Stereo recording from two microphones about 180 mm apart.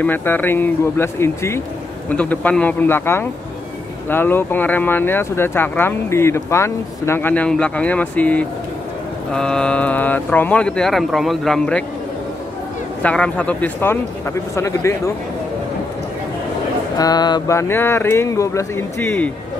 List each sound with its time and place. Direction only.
0.0 s speech: 10° left (ahead or behind)
13.0 s speech: 5° left (ahead or behind)
16.9 s speech: 20° left (ahead or behind)